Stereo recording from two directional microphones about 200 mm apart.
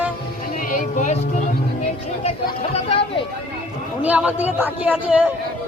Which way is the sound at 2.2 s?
30° left (ahead or behind).